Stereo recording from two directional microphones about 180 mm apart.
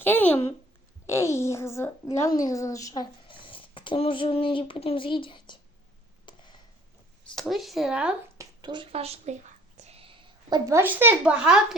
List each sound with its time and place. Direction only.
0.0 s a woman's voice: 10° left (ahead or behind); by 5.5 s 25° left (ahead or behind)
6.2 s a sound: 25° left (ahead or behind)
7.3 s speech: centre (ahead or behind)
8.4 s a woman's voice: 25° right (ahead or behind)
9.7 s whispering: 35° right (ahead or behind)
10.5 s speech: 15° right (ahead or behind)